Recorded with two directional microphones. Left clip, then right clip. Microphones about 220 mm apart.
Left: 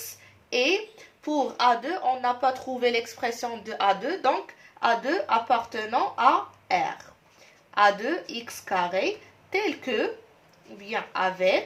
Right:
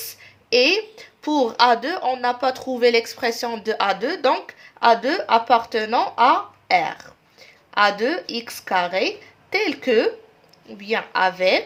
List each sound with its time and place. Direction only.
0.5 s speech: 50° right (ahead or behind)